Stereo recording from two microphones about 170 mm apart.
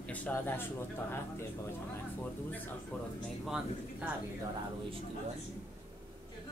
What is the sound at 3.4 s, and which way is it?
Speech, 5° right (ahead or behind).